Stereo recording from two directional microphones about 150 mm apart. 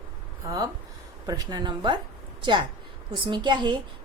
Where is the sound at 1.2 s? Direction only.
25° right (ahead or behind).